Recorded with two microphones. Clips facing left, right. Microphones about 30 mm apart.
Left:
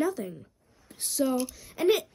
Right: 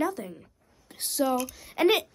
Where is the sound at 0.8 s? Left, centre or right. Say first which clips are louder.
Right 2 dB; right.